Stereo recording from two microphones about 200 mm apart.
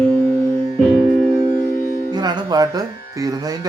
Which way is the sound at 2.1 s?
20° right (ahead or behind).